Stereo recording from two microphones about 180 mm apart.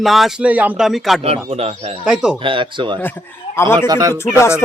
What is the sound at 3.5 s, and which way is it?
Speech, 15° left (ahead or behind).